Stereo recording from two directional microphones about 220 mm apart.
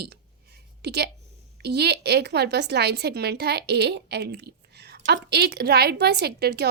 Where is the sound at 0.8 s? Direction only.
50° right (ahead or behind).